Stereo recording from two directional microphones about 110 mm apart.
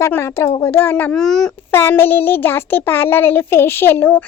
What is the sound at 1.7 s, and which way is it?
A child's voice, 20° left (ahead or behind).